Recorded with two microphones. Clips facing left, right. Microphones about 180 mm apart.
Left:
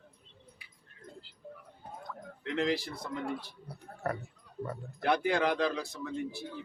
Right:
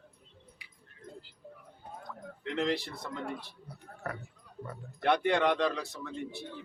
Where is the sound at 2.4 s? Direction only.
Centre (ahead or behind).